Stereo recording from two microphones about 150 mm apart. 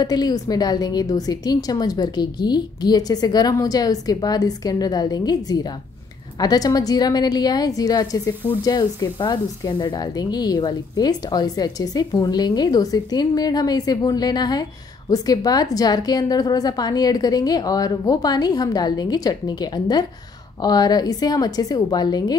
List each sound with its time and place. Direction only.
0.0 s speech: 25° left (ahead or behind)